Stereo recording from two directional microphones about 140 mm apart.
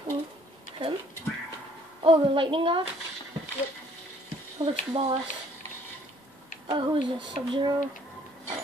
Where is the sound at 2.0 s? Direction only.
40° right (ahead or behind).